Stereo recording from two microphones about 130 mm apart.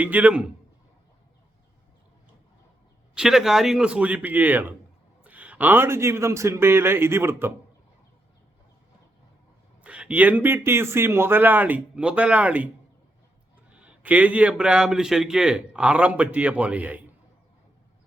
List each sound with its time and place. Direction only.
0.0 s a man's voice: 10° right (ahead or behind)
3.2 s a man's voice: 5° right (ahead or behind)
9.8 s a man's voice: 10° right (ahead or behind)
13.7 s a man's voice: 10° right (ahead or behind)